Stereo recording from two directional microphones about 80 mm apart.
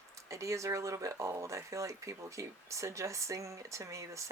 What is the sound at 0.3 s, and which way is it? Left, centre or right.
Speech, right.